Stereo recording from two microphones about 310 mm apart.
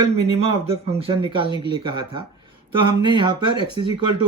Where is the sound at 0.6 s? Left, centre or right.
Centre.